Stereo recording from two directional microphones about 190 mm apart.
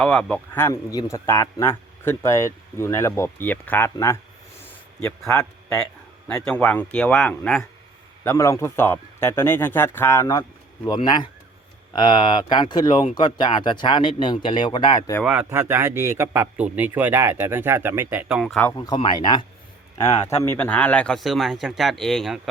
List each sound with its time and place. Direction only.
0.0 s speech: 5° left (ahead or behind)
5.3 s speech: 15° left (ahead or behind)
5.7 s speech: 5° left (ahead or behind); by 15.1 s 25° left (ahead or behind)
15.2 s a man's voice: 5° right (ahead or behind)
18.9 s speech: 25° left (ahead or behind); by 22.4 s centre (ahead or behind)